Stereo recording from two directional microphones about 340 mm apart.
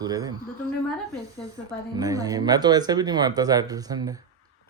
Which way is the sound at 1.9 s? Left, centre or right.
Centre.